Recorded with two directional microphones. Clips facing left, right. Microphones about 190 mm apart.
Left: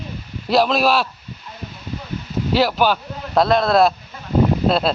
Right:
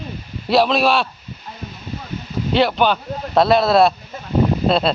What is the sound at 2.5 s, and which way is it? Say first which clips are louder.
A man's voice: right 1 dB; 5° left (ahead or behind).